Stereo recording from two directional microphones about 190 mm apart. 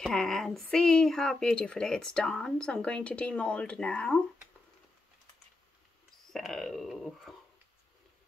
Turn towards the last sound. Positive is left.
turn(degrees=0)  # may be behind; listen again after turning